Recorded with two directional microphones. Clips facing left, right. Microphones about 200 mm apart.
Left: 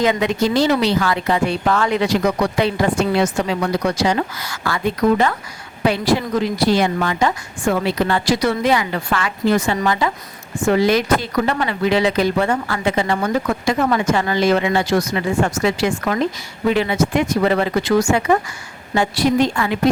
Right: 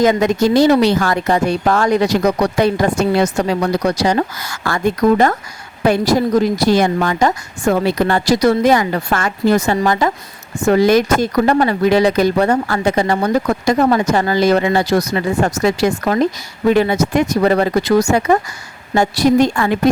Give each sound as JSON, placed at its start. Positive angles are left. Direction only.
{"t": 0.0, "sound": "speech", "side_deg": -45}